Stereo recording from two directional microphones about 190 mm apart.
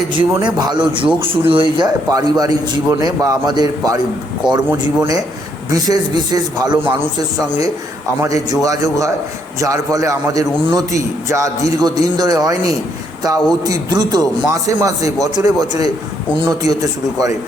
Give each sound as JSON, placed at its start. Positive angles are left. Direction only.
{"t": 0.1, "sound": "a man's voice", "side_deg": -25}
{"t": 8.2, "sound": "a man's voice", "side_deg": -15}